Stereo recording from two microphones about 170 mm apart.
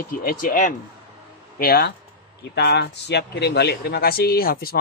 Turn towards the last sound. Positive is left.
turn(degrees=60)  # may be behind; listen again after turning